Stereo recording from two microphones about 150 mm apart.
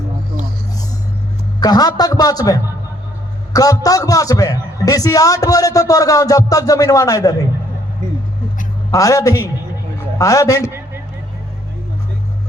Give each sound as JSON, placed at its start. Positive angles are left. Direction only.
{"t": 1.6, "sound": "a man's voice", "side_deg": 25}
{"t": 8.9, "sound": "a man's voice", "side_deg": 20}